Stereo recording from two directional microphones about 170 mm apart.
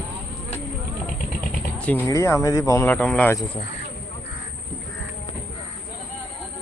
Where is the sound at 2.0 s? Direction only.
15° left (ahead or behind).